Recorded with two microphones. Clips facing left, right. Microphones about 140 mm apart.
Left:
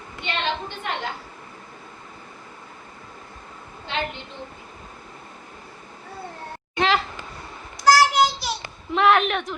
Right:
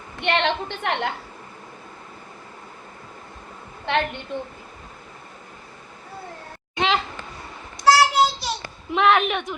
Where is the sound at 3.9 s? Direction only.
65° right (ahead or behind).